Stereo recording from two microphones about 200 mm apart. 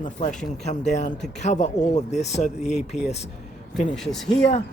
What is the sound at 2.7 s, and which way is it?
Speech, 5° right (ahead or behind).